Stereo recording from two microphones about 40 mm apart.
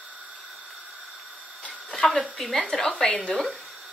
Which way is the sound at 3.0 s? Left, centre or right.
Left.